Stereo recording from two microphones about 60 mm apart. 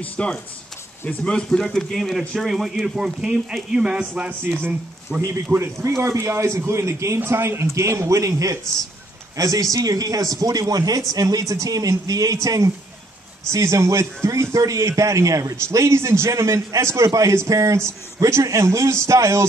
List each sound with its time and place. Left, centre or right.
0.0 s speech: left; by 4.1 s centre
5.2 s a man's voice: right
13.5 s a man's voice: right